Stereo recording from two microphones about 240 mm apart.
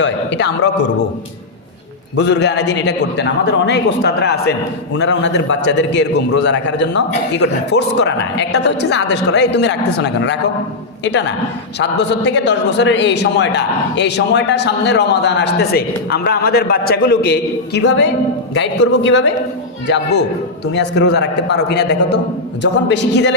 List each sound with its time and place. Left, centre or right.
0.0 s a man's voice: left
2.1 s a man's voice: left